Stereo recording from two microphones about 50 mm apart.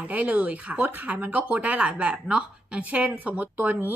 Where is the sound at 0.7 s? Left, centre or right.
Right.